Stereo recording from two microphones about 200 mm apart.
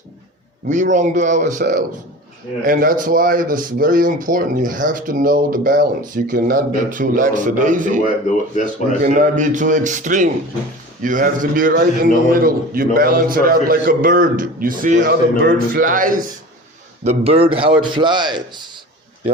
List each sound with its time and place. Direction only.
0.7 s a man's voice: 40° right (ahead or behind)
9.0 s a man's voice: 40° right (ahead or behind)
17.0 s a man's voice: 30° right (ahead or behind)